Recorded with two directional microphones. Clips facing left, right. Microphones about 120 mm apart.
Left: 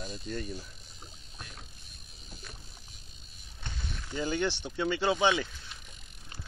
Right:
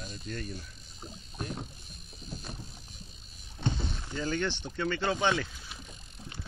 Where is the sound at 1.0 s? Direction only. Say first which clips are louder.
Right 10 dB; 35° right (ahead or behind).